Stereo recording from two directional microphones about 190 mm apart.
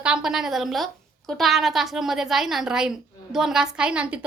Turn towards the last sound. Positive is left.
turn(degrees=-5)  # may be behind; listen again after turning